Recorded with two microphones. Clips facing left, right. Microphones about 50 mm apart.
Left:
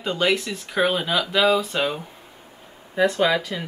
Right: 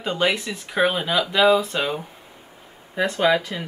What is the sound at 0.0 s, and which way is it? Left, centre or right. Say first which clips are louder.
Speech: even; centre.